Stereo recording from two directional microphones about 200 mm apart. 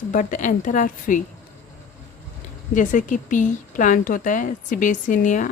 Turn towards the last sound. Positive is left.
turn(degrees=40)  # may be behind; listen again after turning